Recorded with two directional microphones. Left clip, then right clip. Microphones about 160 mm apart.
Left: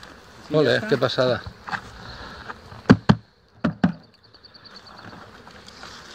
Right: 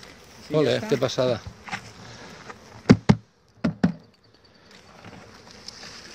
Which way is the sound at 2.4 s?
50° right (ahead or behind).